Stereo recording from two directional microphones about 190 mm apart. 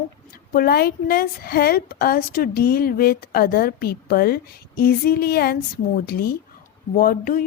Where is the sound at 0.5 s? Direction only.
55° left (ahead or behind).